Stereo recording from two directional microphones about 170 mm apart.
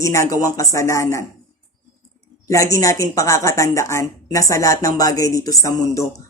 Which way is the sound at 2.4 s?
20° left (ahead or behind).